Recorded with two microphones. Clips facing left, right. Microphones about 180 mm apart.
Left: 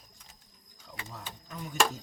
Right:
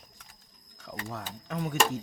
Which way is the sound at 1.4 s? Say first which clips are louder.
Right 10 dB; 70° right (ahead or behind).